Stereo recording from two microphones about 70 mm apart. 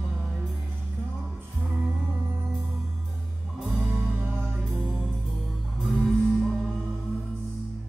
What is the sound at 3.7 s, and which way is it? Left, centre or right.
Music, right.